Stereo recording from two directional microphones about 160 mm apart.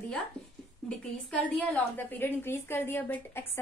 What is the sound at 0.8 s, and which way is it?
A woman's voice, 10° left (ahead or behind).